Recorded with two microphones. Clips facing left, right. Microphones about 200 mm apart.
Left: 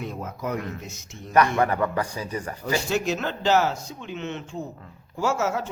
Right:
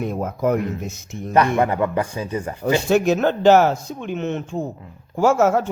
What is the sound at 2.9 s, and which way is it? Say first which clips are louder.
Speech: right 9 dB; 55° right (ahead or behind).